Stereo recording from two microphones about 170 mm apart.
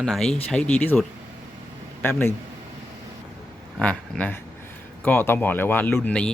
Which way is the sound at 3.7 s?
10° left (ahead or behind).